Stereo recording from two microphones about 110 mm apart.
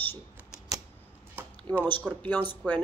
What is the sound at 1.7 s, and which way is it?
Speech, 20° left (ahead or behind).